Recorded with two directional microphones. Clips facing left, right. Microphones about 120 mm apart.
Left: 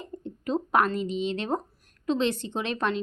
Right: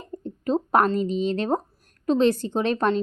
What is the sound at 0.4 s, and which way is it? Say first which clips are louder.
A woman's voice: right 4 dB; 40° right (ahead or behind).